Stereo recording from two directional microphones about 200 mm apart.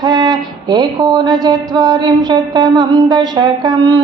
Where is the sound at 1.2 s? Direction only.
20° right (ahead or behind).